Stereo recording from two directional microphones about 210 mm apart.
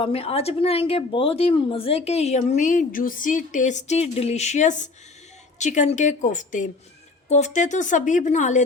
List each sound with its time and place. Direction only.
0.0 s a woman's voice: 30° left (ahead or behind)